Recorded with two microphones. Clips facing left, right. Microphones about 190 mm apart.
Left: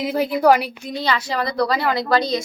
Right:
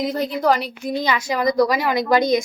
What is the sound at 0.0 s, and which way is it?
Speech, 10° left (ahead or behind).